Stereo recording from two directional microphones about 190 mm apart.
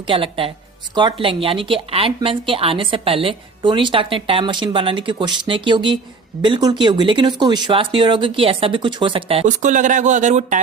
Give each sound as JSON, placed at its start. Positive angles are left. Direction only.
{"t": 0.0, "sound": "a woman's voice", "side_deg": -30}